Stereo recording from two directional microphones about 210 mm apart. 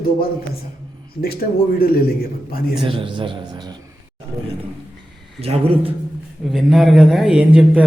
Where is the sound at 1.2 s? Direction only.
45° left (ahead or behind).